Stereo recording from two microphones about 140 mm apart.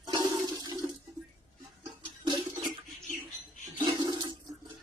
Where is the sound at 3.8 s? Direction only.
35° right (ahead or behind).